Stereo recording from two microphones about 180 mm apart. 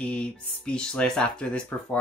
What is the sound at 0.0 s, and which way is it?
Speech, 5° left (ahead or behind).